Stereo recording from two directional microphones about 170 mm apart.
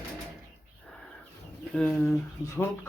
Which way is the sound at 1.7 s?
5° left (ahead or behind).